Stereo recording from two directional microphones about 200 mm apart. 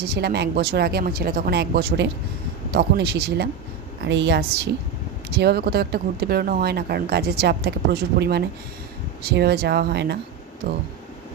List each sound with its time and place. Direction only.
0.0 s speech: 55° right (ahead or behind)